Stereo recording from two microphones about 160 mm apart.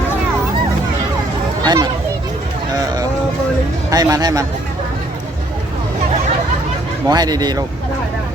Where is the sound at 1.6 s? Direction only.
25° right (ahead or behind).